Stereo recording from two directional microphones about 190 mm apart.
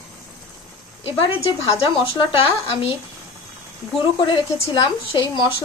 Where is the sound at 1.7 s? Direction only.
25° left (ahead or behind).